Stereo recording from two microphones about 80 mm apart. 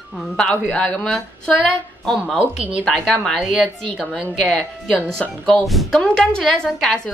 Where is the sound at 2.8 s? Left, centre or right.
Centre.